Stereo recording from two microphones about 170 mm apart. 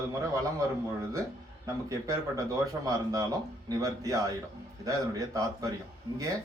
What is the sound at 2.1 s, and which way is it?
A man's voice, 20° right (ahead or behind).